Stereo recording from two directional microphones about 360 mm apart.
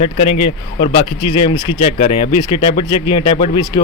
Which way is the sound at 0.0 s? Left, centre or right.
Centre.